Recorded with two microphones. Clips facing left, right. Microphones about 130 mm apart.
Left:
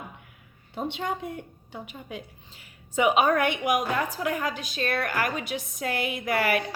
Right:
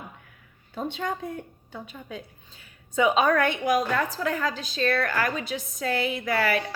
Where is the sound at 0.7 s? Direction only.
20° left (ahead or behind).